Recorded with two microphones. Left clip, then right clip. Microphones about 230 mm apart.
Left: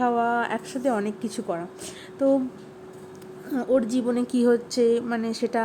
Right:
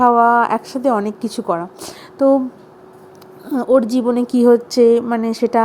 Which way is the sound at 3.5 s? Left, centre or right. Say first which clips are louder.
Right 9 dB; right.